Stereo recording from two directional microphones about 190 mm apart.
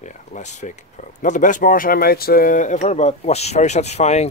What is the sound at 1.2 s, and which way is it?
Speech, 40° left (ahead or behind).